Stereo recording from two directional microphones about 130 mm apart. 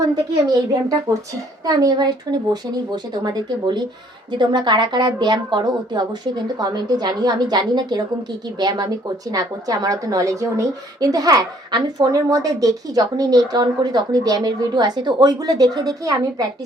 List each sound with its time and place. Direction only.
0.4 s a woman's voice: 30° right (ahead or behind)